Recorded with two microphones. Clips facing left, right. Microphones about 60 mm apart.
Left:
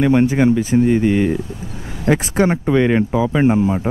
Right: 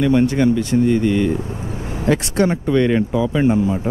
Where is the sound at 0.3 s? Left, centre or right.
Centre.